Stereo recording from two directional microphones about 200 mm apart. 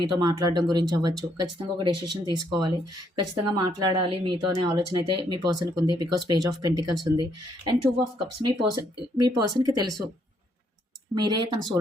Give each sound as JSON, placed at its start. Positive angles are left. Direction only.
{"t": 0.0, "sound": "speech", "side_deg": -20}
{"t": 11.1, "sound": "speech", "side_deg": -20}